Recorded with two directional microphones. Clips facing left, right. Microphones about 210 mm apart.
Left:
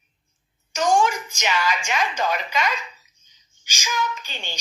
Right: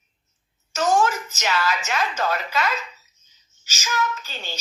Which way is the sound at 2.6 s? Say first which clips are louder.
Even; 5° right (ahead or behind).